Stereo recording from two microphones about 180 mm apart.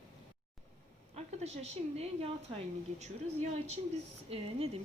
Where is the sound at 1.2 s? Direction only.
35° right (ahead or behind).